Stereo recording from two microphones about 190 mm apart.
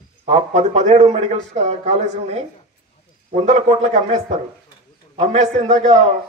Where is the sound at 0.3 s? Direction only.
35° right (ahead or behind).